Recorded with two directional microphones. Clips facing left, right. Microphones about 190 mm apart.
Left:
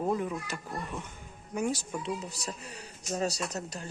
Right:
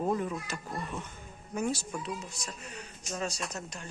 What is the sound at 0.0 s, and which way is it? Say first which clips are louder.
Speech: even; 5° left (ahead or behind).